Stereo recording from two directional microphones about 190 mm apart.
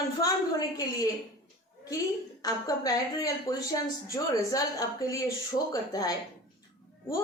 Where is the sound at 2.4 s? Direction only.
20° left (ahead or behind).